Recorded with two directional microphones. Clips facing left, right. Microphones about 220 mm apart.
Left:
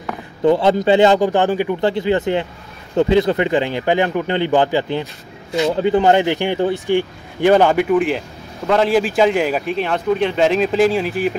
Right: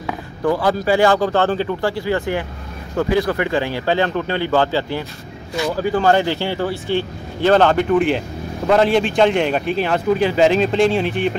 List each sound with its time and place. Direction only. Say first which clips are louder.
0.4 s a man's voice: left 4 dB; 25° left (ahead or behind)
7.9 s a man's voice: even; centre (ahead or behind)